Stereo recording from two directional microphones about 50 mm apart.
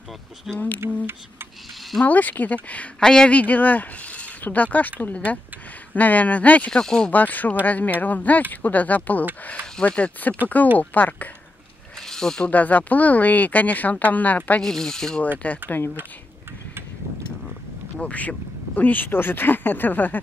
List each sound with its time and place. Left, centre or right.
0.5 s speech: centre
0.8 s a sound: right
2.0 s speech: left
3.0 s speech: centre
3.3 s speech: left
6.7 s speech: centre
7.1 s speech: left
12.1 s speech: centre
12.4 s speech: left
14.6 s speech: centre
15.3 s speech: left
17.9 s speech: left
18.8 s speech: left